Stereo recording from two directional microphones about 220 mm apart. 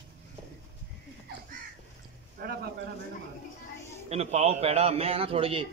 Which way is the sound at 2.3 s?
45° right (ahead or behind).